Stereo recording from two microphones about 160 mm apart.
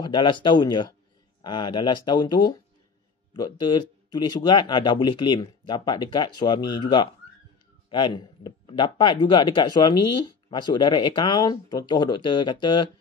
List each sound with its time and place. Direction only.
0.0 s speech: 30° left (ahead or behind)